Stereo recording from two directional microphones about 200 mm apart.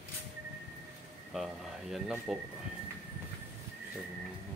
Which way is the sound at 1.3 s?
Centre (ahead or behind).